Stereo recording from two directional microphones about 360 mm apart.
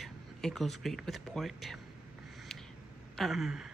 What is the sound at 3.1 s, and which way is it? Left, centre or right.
Speech, centre.